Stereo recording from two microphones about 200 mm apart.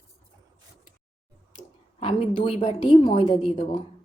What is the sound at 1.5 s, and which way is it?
A woman's voice, 30° left (ahead or behind).